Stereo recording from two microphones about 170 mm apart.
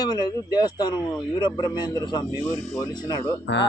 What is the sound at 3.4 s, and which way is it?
Speech, 90° left.